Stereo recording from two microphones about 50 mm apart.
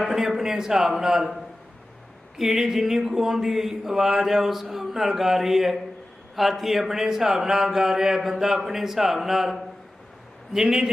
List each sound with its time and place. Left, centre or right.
0.0 s speech: centre
2.4 s speech: centre
10.5 s speech: centre